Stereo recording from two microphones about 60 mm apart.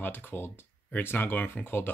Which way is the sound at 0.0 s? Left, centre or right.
Left.